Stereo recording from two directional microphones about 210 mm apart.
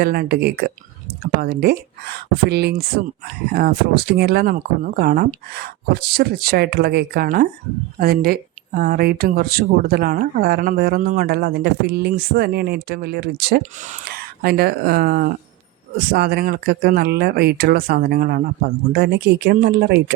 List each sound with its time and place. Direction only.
0.0 s speech: 45° right (ahead or behind)